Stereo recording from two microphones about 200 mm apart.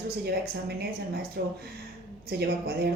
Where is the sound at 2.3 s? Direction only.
55° right (ahead or behind).